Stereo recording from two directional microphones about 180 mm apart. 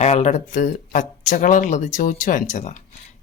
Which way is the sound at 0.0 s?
40° left (ahead or behind).